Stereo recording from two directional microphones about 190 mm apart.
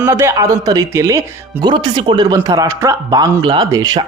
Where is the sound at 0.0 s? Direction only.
15° right (ahead or behind).